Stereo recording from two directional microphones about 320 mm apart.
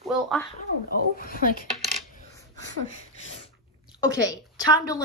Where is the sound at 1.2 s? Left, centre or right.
Left.